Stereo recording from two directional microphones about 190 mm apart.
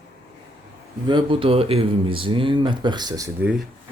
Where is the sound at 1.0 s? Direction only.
25° right (ahead or behind).